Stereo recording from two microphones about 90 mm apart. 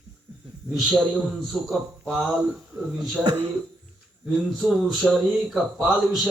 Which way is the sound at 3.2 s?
65° right (ahead or behind).